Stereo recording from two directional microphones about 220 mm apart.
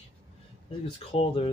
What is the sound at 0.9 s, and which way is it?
Speech, 25° left (ahead or behind).